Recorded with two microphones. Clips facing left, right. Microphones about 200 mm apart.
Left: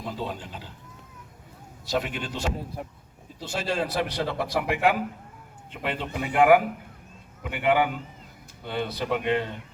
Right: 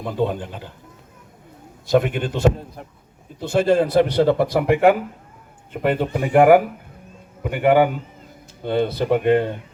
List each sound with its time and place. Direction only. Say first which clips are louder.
0.0 s a man's voice: right 10 dB; 55° right (ahead or behind)
1.9 s a man's voice: right 10 dB; 55° right (ahead or behind)